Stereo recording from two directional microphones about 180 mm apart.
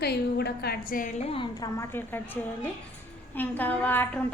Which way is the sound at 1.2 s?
30° left (ahead or behind).